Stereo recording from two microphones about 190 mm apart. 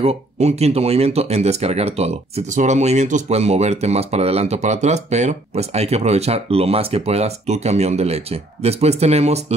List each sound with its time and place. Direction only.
0.0 s speech: 35° right (ahead or behind)